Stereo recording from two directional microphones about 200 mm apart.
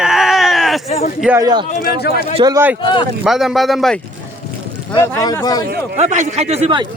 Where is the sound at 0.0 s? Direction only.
Centre (ahead or behind).